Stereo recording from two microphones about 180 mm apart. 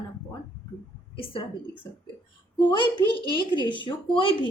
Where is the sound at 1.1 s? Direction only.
30° left (ahead or behind).